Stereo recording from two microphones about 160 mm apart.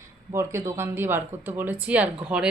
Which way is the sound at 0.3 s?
15° right (ahead or behind).